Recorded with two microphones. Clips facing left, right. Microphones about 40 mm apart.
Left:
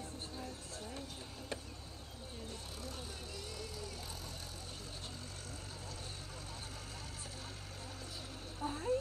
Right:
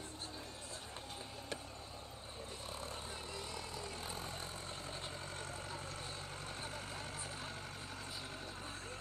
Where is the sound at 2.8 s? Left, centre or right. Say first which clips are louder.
Right 1 dB; right.